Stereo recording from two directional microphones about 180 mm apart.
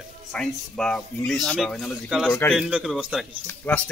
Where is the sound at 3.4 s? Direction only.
10° left (ahead or behind).